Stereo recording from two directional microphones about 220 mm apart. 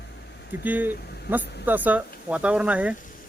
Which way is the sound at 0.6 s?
10° right (ahead or behind).